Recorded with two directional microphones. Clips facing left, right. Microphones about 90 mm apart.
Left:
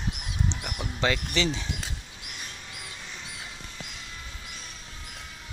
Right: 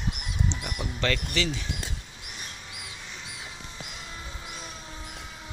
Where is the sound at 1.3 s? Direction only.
30° left (ahead or behind).